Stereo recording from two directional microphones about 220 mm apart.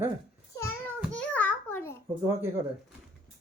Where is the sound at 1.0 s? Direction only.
5° left (ahead or behind).